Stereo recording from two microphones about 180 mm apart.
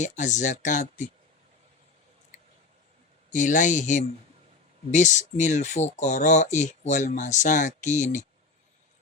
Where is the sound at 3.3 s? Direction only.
45° left (ahead or behind).